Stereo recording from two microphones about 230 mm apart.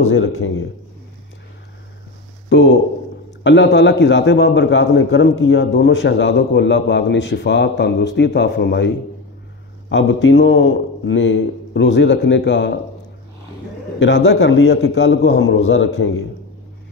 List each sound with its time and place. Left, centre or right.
0.1 s speech: left
2.5 s a man's voice: left
13.9 s a man's voice: left